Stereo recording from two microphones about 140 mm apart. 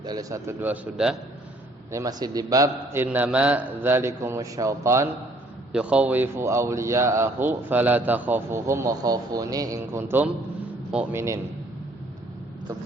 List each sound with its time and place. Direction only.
0.0 s speech: 30° right (ahead or behind); by 1.1 s 10° right (ahead or behind)
1.9 s speech: 25° right (ahead or behind)
5.7 s speech: 10° right (ahead or behind)